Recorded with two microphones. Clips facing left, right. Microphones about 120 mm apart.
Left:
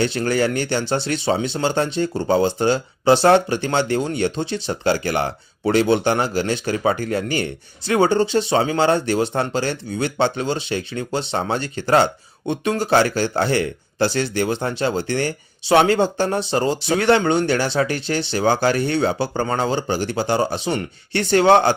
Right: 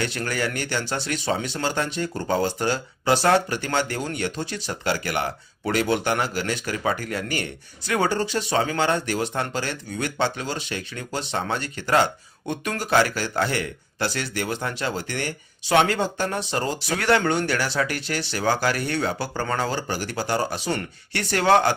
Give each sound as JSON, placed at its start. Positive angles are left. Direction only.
{"t": 0.0, "sound": "speech", "side_deg": 30}